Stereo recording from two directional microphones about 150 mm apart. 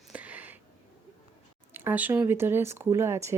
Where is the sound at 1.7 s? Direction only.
15° right (ahead or behind).